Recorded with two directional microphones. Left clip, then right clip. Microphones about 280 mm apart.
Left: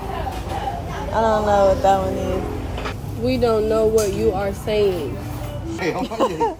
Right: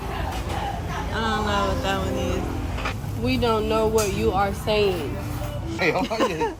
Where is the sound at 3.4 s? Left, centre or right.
Right.